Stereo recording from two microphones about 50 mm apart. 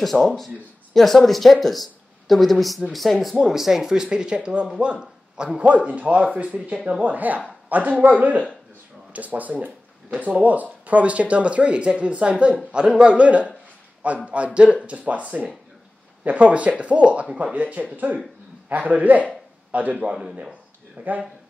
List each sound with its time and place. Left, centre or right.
0.0 s speech: centre; by 7.0 s right
7.0 s a man's voice: right